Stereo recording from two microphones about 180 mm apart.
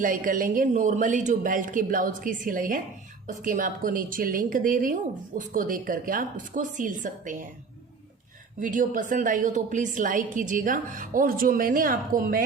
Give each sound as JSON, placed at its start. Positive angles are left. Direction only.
{"t": 0.0, "sound": "a woman's voice", "side_deg": -50}
{"t": 8.6, "sound": "a woman's voice", "side_deg": -45}